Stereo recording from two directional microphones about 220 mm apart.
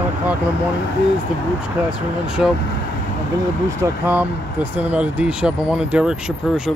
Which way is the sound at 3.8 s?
10° right (ahead or behind).